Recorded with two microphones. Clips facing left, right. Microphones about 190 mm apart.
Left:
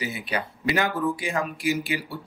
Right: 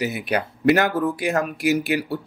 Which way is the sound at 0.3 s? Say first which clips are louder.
Right 9 dB; 60° right (ahead or behind).